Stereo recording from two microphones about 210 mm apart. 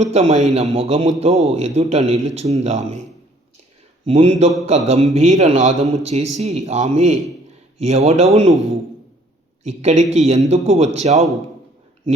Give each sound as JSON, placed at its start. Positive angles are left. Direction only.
{"t": 0.0, "sound": "a man's voice", "side_deg": -30}
{"t": 4.0, "sound": "a man's voice", "side_deg": -30}
{"t": 9.6, "sound": "a man's voice", "side_deg": -35}